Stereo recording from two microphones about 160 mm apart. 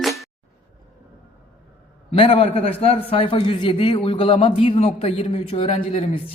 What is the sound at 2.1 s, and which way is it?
A man's voice, 35° left (ahead or behind).